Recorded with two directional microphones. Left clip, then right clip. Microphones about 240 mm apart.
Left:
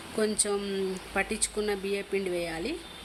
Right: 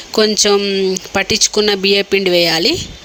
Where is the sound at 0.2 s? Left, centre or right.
Right.